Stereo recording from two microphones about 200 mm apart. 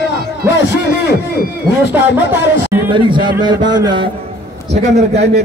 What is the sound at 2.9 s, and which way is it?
Speech, 25° right (ahead or behind).